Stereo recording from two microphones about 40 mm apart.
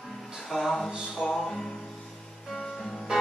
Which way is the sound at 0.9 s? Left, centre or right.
Centre.